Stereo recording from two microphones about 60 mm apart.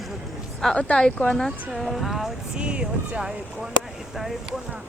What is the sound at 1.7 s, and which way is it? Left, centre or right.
Speech, centre.